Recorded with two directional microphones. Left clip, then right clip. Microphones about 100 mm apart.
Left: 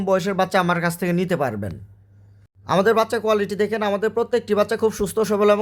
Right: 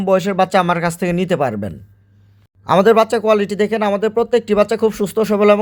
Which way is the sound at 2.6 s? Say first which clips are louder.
Right 6 dB; 40° right (ahead or behind).